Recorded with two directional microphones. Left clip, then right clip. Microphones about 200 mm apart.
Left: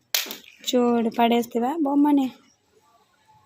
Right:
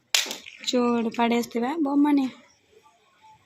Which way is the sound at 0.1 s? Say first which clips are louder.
Right 3 dB; 10° left (ahead or behind).